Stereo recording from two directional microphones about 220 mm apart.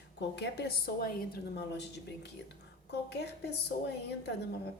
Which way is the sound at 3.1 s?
50° left (ahead or behind).